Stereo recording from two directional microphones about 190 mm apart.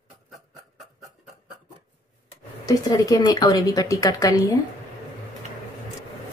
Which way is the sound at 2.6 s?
20° left (ahead or behind).